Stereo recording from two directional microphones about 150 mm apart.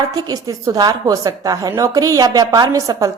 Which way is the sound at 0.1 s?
25° right (ahead or behind).